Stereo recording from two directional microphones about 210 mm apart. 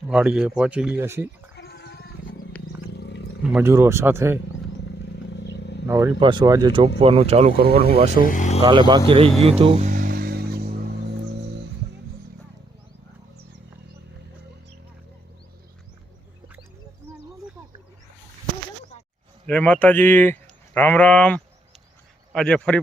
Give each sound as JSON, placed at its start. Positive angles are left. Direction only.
{"t": 0.1, "sound": "speech", "side_deg": -5}
{"t": 1.5, "sound": "a sound", "side_deg": 50}
{"t": 3.5, "sound": "speech", "side_deg": -10}
{"t": 5.4, "sound": "vehicle", "side_deg": 55}
{"t": 6.1, "sound": "speech", "side_deg": -20}
{"t": 8.2, "sound": "speech", "side_deg": 35}
{"t": 8.6, "sound": "speech", "side_deg": -20}
{"t": 9.9, "sound": "vehicle", "side_deg": -45}
{"t": 19.5, "sound": "speech", "side_deg": 5}